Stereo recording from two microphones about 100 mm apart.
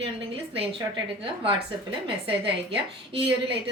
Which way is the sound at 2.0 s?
60° right (ahead or behind).